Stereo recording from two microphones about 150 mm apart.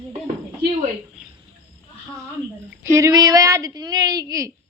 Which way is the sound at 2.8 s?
20° right (ahead or behind).